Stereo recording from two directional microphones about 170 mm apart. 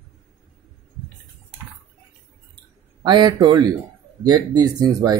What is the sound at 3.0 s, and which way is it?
Speech, 25° right (ahead or behind).